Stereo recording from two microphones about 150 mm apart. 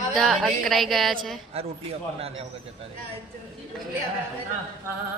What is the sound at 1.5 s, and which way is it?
Speech, 40° right (ahead or behind).